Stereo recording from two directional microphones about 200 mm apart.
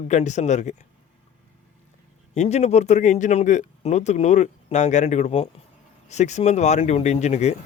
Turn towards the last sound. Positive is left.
turn(degrees=35)  # may be behind; listen again after turning